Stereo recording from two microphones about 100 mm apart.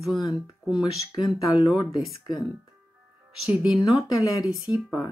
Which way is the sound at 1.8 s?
40° left (ahead or behind).